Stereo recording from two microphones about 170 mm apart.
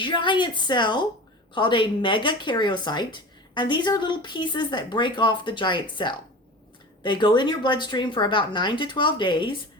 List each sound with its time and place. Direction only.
0.0 s speech: 30° left (ahead or behind)